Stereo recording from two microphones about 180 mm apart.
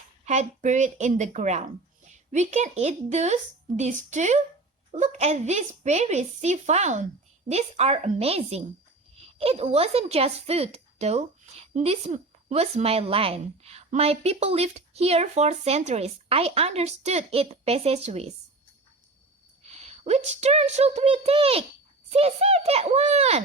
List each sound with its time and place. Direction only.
0.3 s speech: 40° right (ahead or behind)
19.6 s speech: 35° right (ahead or behind)